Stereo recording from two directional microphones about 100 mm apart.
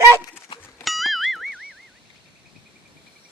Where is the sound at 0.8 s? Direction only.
Centre (ahead or behind).